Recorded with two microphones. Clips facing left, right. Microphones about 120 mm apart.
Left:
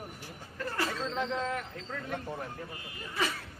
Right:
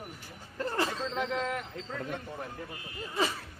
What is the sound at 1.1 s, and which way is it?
Speech, 10° right (ahead or behind).